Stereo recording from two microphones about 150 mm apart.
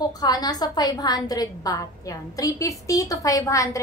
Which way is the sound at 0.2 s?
25° left (ahead or behind).